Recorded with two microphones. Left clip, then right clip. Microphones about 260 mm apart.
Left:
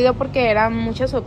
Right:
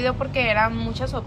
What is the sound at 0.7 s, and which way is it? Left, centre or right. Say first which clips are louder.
Speech: left 5 dB; right.